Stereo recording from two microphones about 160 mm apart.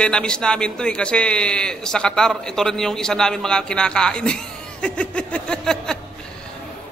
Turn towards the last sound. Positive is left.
turn(degrees=5)  # may be behind; listen again after turning